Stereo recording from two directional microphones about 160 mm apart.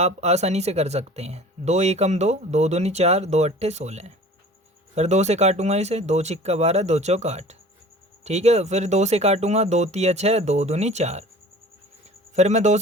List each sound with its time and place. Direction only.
0.0 s speech: 45° right (ahead or behind)
12.3 s speech: 45° right (ahead or behind)